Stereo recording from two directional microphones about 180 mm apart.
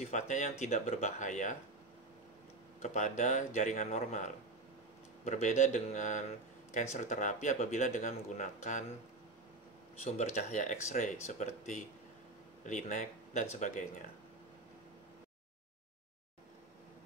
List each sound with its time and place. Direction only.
0.0 s speech: 40° left (ahead or behind)
2.8 s speech: 40° left (ahead or behind)
10.0 s speech: 40° left (ahead or behind)